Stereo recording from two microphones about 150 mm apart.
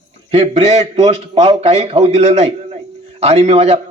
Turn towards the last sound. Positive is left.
turn(degrees=-40)  # may be behind; listen again after turning